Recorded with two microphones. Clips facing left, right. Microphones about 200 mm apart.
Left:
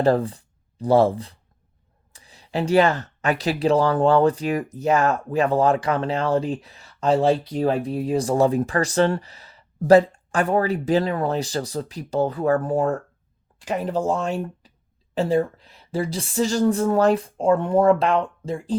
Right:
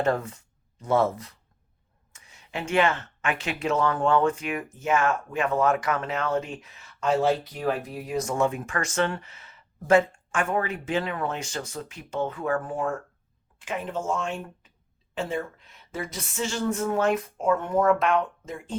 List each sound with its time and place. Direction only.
0.0 s speech: 35° left (ahead or behind)